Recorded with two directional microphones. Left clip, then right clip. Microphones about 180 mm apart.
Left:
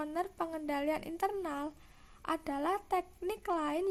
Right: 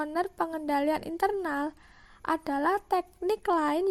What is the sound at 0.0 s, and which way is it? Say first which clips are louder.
Speech: right 7 dB; 35° right (ahead or behind).